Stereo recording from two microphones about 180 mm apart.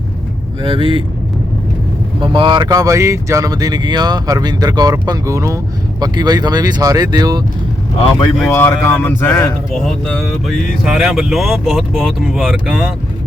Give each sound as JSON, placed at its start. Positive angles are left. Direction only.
{"t": 0.6, "sound": "speech", "side_deg": -30}
{"t": 2.2, "sound": "speech", "side_deg": -25}
{"t": 8.4, "sound": "speech", "side_deg": 15}